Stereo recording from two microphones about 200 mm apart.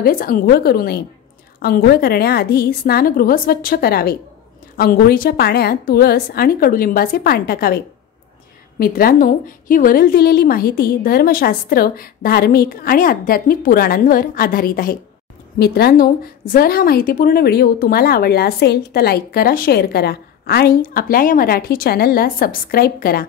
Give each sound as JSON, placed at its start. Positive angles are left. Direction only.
{"t": 0.0, "sound": "a woman's voice", "side_deg": 45}